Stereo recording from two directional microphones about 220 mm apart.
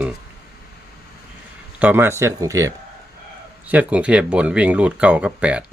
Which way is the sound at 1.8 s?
10° right (ahead or behind).